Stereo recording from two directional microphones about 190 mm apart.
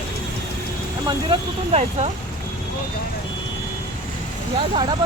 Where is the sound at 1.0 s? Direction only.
30° right (ahead or behind).